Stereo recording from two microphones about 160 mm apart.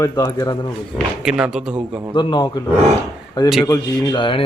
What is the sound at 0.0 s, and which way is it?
Speech, 20° left (ahead or behind).